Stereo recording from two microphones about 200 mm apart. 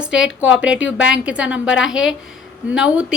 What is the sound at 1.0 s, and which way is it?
A woman's voice, 5° right (ahead or behind).